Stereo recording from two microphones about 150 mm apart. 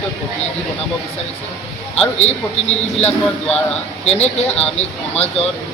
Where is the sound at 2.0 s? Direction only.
45° left (ahead or behind).